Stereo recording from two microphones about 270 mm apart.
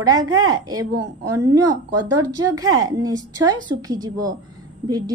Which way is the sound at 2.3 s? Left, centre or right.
Centre.